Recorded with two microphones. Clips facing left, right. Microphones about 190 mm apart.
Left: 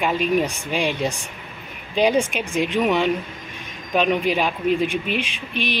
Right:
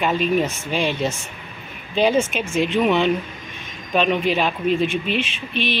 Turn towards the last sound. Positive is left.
turn(degrees=15)  # may be behind; listen again after turning